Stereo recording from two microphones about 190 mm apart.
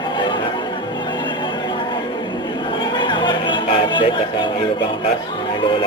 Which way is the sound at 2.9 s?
25° left (ahead or behind).